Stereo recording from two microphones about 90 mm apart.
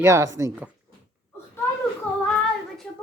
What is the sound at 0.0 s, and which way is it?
Speech, 35° right (ahead or behind).